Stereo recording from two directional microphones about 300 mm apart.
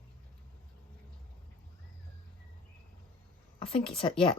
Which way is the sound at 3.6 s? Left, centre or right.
Centre.